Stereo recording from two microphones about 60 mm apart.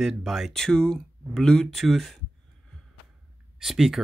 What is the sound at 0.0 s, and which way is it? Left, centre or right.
Speech, centre.